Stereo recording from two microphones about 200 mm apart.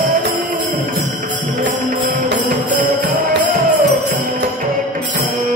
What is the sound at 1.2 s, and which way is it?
Music, 45° right (ahead or behind).